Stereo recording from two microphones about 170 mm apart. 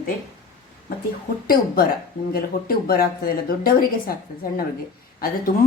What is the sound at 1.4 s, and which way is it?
Speech, 60° left (ahead or behind).